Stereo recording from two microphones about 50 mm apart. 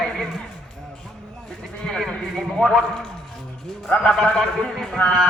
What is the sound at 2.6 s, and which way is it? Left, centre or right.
Speech, centre.